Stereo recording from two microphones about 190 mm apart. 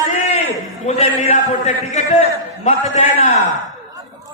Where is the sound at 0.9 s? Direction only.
35° left (ahead or behind).